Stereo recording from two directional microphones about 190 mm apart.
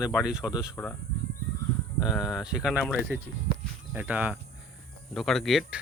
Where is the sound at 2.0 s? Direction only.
Centre (ahead or behind).